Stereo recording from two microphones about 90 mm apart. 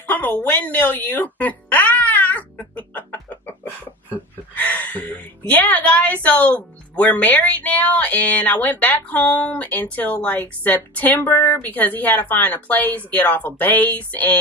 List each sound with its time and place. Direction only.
0.1 s music: 20° left (ahead or behind)
4.1 s a sound: 20° left (ahead or behind)
5.5 s a woman's voice: 15° left (ahead or behind)